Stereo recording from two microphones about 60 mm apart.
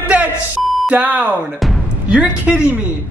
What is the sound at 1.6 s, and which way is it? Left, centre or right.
Speech, centre.